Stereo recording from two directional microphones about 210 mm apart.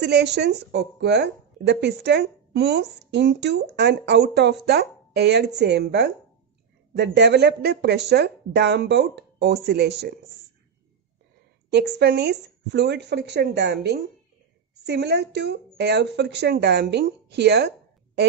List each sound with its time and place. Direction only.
0.0 s speech: 50° right (ahead or behind)
11.7 s speech: 50° right (ahead or behind)